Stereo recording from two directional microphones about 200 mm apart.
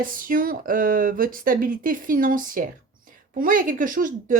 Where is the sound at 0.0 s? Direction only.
45° right (ahead or behind).